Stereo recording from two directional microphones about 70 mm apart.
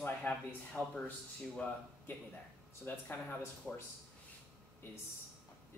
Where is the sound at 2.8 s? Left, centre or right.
Left.